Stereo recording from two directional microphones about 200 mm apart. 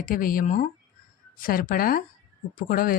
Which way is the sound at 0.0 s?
45° left (ahead or behind).